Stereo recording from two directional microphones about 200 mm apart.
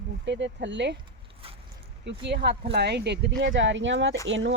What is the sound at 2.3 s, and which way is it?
Speech, 55° right (ahead or behind).